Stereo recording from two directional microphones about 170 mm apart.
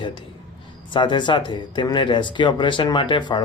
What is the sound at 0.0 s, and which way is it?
A man's voice, 30° left (ahead or behind).